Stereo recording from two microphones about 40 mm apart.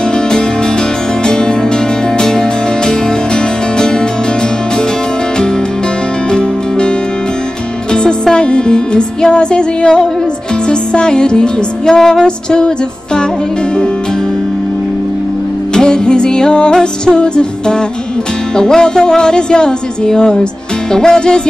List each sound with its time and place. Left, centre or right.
1.2 s music: centre
3.7 s music: centre
7.9 s music: left
15.7 s speech: centre
20.9 s music: centre